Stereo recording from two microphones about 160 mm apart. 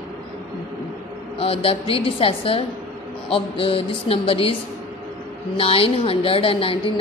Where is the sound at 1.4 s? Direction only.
35° left (ahead or behind).